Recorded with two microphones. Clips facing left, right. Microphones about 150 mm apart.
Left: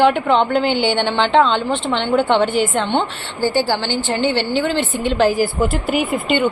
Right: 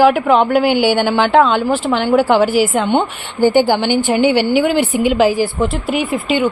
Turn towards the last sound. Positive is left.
turn(degrees=0)  # may be behind; listen again after turning